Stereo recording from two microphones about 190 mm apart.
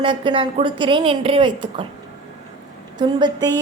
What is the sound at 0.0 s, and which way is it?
Speech, 25° right (ahead or behind).